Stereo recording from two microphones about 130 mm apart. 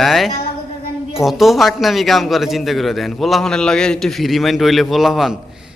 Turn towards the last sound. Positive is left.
turn(degrees=0)  # may be behind; listen again after turning